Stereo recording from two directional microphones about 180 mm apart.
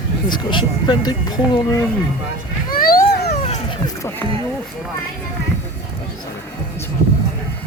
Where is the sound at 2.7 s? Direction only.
50° left (ahead or behind).